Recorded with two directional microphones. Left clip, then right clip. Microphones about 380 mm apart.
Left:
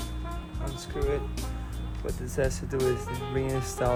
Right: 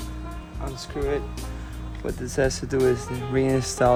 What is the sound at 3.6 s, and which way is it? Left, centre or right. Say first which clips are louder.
Speech: right 8 dB; right.